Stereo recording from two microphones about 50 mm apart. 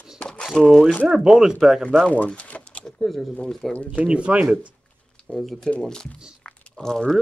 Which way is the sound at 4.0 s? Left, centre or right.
Right.